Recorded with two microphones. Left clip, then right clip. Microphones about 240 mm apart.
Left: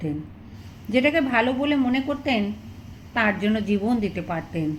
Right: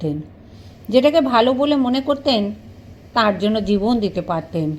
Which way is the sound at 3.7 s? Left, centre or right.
Centre.